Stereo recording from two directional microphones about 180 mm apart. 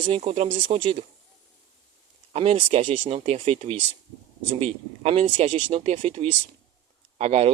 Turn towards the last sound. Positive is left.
turn(degrees=-35)  # may be behind; listen again after turning